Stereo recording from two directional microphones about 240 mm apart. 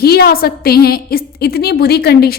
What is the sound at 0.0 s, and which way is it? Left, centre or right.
A woman's voice, left.